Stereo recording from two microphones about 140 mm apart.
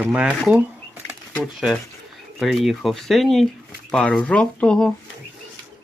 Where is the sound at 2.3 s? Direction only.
Centre (ahead or behind).